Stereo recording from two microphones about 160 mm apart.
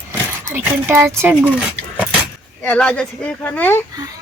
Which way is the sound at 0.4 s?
15° right (ahead or behind).